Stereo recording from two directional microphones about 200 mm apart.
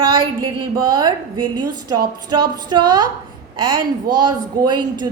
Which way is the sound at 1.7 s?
20° right (ahead or behind).